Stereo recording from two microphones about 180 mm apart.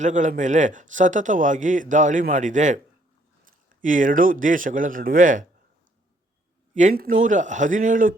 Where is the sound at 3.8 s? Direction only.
45° right (ahead or behind).